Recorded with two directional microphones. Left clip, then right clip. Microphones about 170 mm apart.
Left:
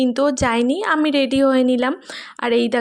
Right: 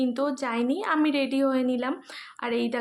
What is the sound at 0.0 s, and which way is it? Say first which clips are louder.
Speech: left 10 dB; 45° left (ahead or behind).